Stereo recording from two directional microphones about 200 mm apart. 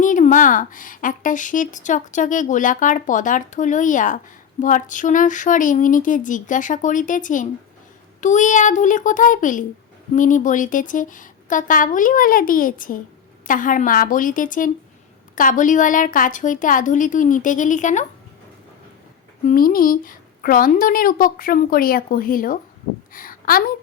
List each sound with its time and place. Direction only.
0.0 s a woman's voice: 40° left (ahead or behind)
19.5 s a woman's voice: 45° left (ahead or behind)